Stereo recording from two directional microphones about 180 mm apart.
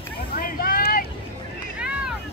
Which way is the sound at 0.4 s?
55° left (ahead or behind).